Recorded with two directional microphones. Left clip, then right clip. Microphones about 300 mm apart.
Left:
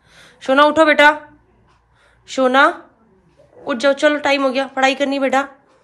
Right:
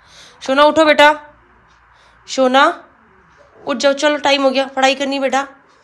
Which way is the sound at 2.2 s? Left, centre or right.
Centre.